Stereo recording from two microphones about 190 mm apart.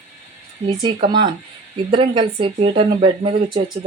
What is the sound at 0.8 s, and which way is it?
Speech, 25° right (ahead or behind).